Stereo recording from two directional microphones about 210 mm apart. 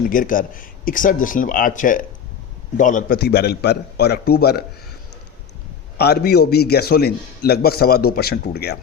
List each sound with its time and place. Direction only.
0.1 s a man's voice: 40° left (ahead or behind)
6.0 s a man's voice: 50° left (ahead or behind)